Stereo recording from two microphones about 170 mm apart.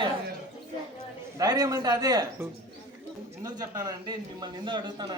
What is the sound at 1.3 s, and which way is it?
Speech, 20° right (ahead or behind).